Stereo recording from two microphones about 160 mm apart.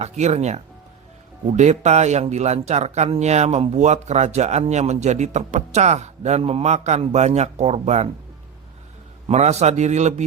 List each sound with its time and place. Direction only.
0.0 s speech: 45° right (ahead or behind)
9.2 s speech: 45° right (ahead or behind)